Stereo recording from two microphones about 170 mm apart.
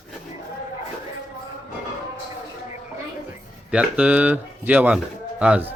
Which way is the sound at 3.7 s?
5° right (ahead or behind).